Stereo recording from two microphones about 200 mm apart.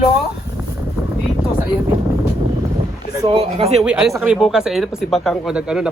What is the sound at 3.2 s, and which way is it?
Speech, 25° right (ahead or behind).